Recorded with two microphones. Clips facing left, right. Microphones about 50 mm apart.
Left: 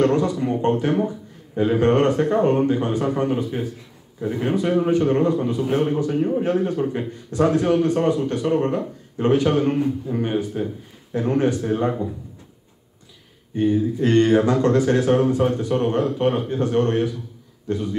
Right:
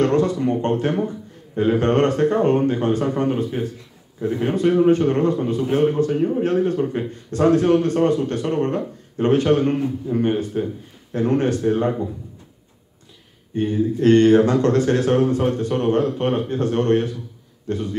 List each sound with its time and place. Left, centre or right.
0.0 s a man's voice: centre
13.6 s a man's voice: centre